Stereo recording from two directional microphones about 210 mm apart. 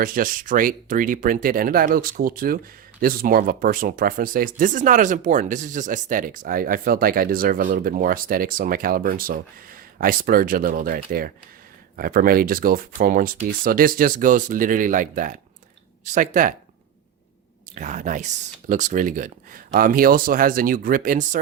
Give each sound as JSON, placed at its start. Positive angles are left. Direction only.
{"t": 0.0, "sound": "speech", "side_deg": -40}
{"t": 17.7, "sound": "speech", "side_deg": -35}